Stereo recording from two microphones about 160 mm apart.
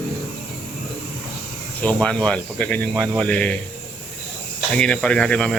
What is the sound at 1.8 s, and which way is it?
Speech, 5° left (ahead or behind).